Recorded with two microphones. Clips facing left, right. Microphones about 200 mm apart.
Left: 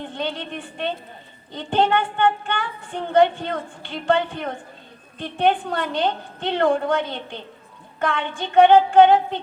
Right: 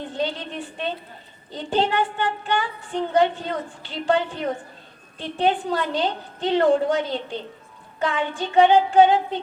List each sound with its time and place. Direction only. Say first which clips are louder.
0.0 s a woman's voice: right 1 dB; 60° left (ahead or behind)